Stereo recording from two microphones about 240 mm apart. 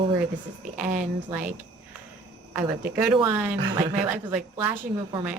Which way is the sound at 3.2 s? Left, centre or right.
Centre.